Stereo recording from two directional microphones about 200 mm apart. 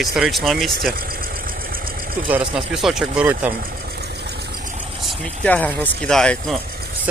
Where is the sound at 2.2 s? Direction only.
5° right (ahead or behind).